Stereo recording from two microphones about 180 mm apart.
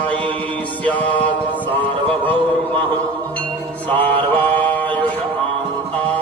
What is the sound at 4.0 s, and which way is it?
Mantra, 30° right (ahead or behind).